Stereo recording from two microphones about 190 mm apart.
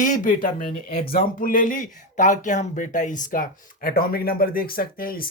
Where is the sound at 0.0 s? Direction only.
45° left (ahead or behind).